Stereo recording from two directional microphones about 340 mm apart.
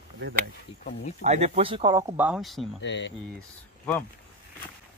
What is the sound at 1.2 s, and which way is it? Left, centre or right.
Speech, centre.